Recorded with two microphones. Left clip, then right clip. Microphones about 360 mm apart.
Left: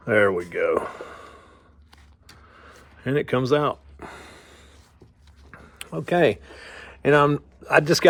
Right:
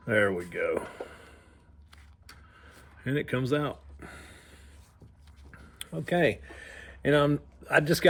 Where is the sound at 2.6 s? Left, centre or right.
Centre.